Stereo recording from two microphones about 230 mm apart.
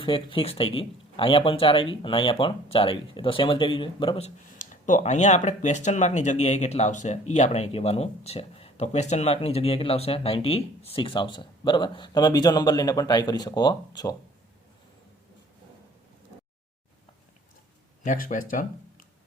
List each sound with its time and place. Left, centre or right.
0.0 s speech: left
18.0 s speech: left